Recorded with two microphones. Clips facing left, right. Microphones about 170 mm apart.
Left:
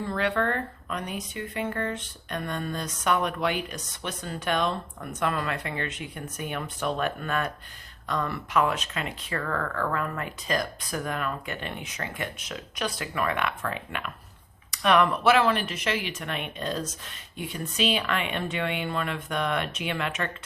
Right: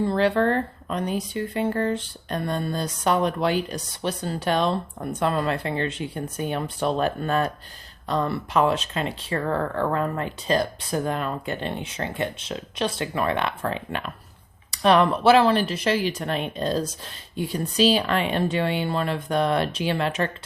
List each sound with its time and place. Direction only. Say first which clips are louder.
0.0 s speech: right 6 dB; 30° right (ahead or behind)